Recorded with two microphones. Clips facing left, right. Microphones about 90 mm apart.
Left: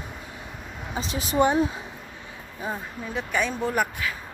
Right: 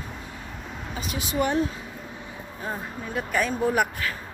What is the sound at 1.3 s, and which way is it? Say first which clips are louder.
Speech: left 3 dB; 20° left (ahead or behind).